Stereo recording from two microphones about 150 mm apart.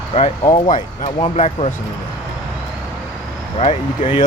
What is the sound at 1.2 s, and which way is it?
Speech, 45° left (ahead or behind).